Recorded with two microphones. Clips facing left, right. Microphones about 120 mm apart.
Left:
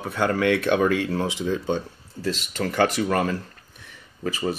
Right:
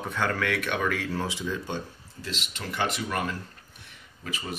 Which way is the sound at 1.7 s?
45° left (ahead or behind).